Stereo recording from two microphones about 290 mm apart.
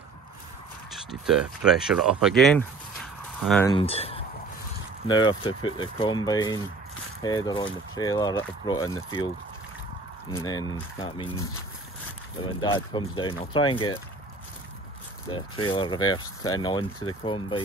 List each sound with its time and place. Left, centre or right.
0.9 s speech: centre
3.7 s speech: centre
10.3 s speech: centre
12.4 s speech: centre
15.3 s speech: centre